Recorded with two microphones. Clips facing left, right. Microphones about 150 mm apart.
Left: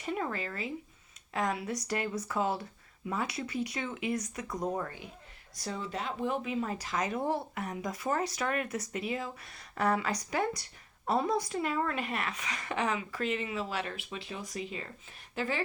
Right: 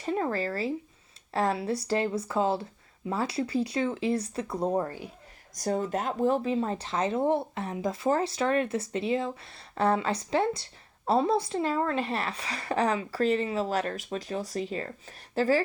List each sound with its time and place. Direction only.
0.0 s speech: 35° right (ahead or behind)
5.5 s speech: 45° right (ahead or behind)